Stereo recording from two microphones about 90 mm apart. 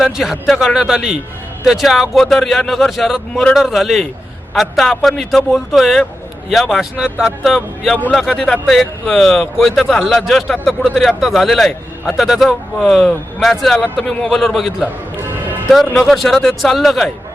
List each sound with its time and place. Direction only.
0.0 s a man's voice: centre (ahead or behind)
15.1 s music: 20° right (ahead or behind)
16.0 s a man's voice: centre (ahead or behind)